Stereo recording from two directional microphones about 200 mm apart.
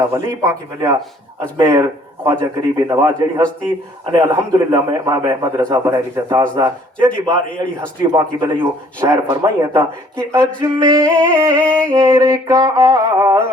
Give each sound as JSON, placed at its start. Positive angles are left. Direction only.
{"t": 0.1, "sound": "a man's voice", "side_deg": -15}